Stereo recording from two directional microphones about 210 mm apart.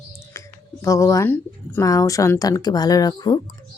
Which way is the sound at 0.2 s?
15° left (ahead or behind).